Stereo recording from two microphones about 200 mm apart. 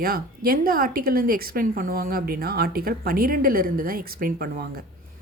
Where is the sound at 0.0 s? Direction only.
45° right (ahead or behind).